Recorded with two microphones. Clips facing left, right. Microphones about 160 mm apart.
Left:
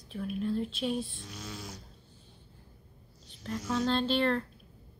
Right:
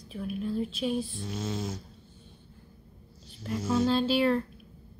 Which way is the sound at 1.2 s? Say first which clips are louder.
Right 10 dB; 25° right (ahead or behind).